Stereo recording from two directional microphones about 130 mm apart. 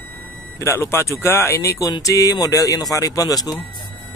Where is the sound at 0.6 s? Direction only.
20° left (ahead or behind).